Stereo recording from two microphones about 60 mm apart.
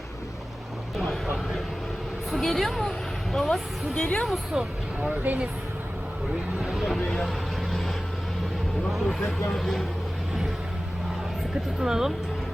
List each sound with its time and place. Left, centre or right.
0.9 s vehicle: centre
2.3 s a woman's voice: centre
4.5 s speech: centre
4.9 s speech: right
6.6 s speech: centre
7.1 s vehicle: centre
8.9 s a woman's voice: centre
11.8 s a woman's voice: centre